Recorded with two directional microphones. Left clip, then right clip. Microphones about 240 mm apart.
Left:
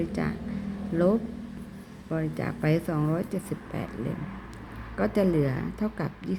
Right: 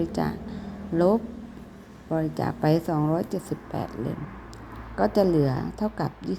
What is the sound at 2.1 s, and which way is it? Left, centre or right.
Speech, centre.